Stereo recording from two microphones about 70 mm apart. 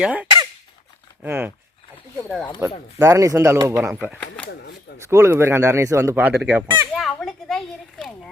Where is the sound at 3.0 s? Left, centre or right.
Right.